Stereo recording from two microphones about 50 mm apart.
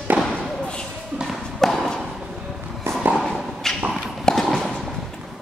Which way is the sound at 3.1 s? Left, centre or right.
Centre.